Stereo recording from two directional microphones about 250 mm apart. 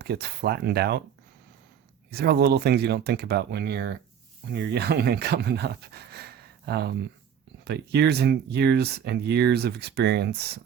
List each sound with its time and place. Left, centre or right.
0.0 s speech: right
2.1 s speech: right